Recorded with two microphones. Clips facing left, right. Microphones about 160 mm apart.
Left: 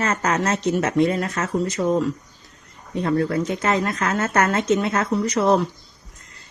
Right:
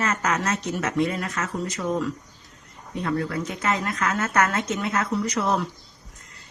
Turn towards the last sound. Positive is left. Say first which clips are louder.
# left 6 dB
turn(degrees=30)  # may be behind; listen again after turning